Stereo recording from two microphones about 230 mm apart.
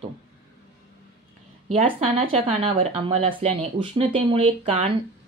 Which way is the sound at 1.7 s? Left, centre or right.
Right.